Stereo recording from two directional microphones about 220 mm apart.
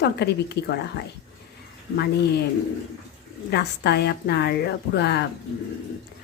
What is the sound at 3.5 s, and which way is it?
Speech, 50° left (ahead or behind).